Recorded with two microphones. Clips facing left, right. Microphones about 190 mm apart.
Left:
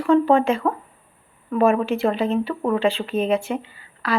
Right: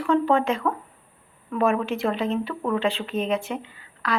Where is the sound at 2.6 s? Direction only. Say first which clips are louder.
Left 4 dB; 30° left (ahead or behind).